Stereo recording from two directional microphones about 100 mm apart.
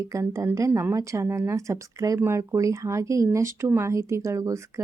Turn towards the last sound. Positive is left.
turn(degrees=-30)  # may be behind; listen again after turning